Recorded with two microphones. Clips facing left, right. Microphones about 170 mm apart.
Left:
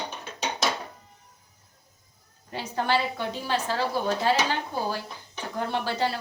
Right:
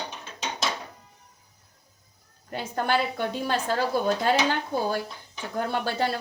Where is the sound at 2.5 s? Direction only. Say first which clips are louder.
Even; 50° right (ahead or behind).